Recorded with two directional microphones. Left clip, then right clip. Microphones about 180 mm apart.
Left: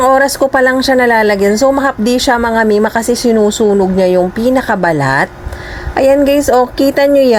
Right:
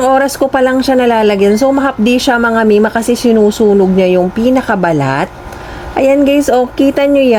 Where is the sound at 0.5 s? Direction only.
15° right (ahead or behind).